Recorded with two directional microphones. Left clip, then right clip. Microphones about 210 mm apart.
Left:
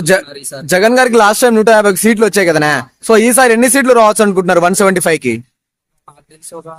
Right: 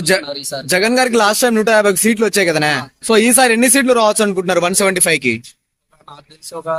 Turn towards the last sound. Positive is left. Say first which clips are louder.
# right 9 dB
turn(degrees=0)  # may be behind; listen again after turning